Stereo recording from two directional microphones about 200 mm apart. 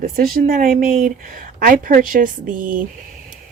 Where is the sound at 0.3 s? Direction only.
45° right (ahead or behind).